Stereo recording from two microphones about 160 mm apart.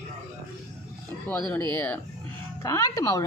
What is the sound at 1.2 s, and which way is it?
A woman's voice, 15° left (ahead or behind).